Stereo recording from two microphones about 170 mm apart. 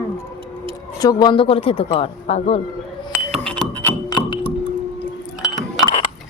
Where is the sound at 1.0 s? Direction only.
25° left (ahead or behind).